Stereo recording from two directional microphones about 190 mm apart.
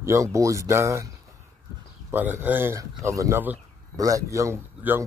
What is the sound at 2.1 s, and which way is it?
Speech, 10° right (ahead or behind).